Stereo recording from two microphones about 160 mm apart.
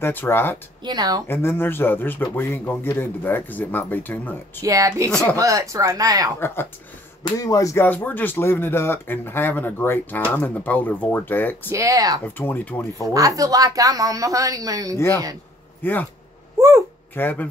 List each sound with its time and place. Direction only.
0.0 s speech: 15° left (ahead or behind)
0.8 s speech: 25° right (ahead or behind)
1.2 s speech: 15° left (ahead or behind)
4.6 s speech: 20° right (ahead or behind)
5.1 s speech: 10° left (ahead or behind)
5.4 s speech: 20° right (ahead or behind)
6.4 s speech: 15° left (ahead or behind)
11.7 s speech: 20° right (ahead or behind)
12.4 s speech: 10° left (ahead or behind)
13.0 s speech: 20° right (ahead or behind)
15.8 s speech: 10° left (ahead or behind)
16.5 s speech: 15° right (ahead or behind)
17.1 s speech: 10° left (ahead or behind)